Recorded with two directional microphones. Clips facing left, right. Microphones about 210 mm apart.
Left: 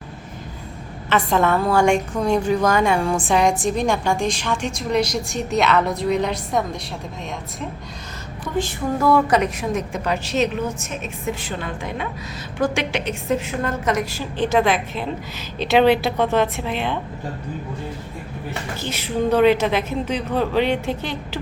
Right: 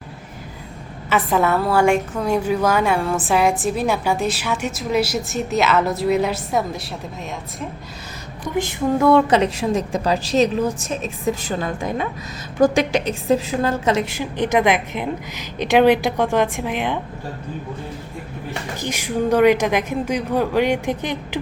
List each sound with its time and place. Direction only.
1.1 s a woman's voice: 5° right (ahead or behind)
8.5 s a woman's voice: 20° right (ahead or behind)
18.8 s a woman's voice: 15° right (ahead or behind)